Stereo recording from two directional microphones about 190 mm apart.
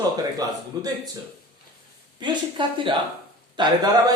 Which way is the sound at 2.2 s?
25° right (ahead or behind).